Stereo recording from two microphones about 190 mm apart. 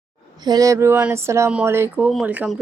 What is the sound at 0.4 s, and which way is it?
Speech, 20° right (ahead or behind).